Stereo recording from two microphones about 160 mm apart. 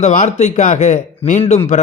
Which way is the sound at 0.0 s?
45° left (ahead or behind).